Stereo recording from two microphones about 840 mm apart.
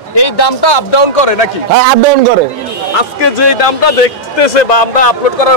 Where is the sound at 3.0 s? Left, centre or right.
Left.